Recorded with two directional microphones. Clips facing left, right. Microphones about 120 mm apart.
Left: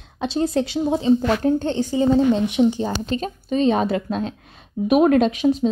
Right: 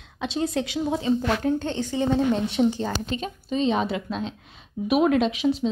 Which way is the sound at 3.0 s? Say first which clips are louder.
Left 5 dB; 40° left (ahead or behind).